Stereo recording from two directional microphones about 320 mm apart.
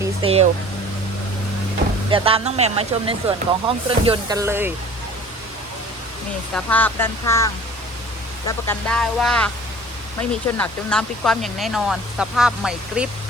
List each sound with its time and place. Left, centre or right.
0.0 s a sound: centre
2.0 s speech: centre
6.5 s speech: centre
10.6 s speech: centre